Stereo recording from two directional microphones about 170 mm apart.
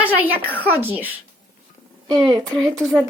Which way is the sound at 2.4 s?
5° left (ahead or behind).